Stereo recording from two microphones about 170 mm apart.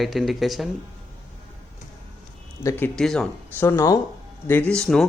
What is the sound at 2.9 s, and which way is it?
Speech, centre (ahead or behind).